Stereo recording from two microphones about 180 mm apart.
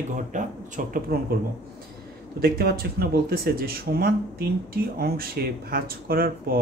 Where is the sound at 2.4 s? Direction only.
60° right (ahead or behind).